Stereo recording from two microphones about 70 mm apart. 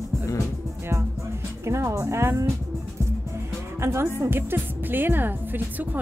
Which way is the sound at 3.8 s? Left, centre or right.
Right.